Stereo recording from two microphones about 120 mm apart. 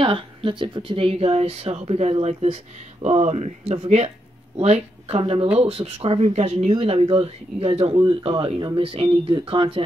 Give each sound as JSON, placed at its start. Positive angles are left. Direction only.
{"t": 0.0, "sound": "speech", "side_deg": -50}
{"t": 6.8, "sound": "speech", "side_deg": -55}